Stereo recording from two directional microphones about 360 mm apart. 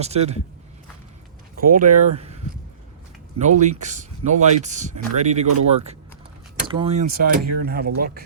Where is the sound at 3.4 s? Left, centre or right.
Centre.